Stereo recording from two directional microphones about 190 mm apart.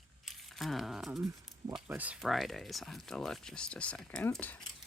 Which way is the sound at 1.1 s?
15° right (ahead or behind).